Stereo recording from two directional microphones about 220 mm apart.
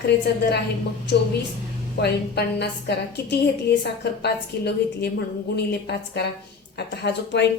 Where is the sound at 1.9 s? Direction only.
50° left (ahead or behind).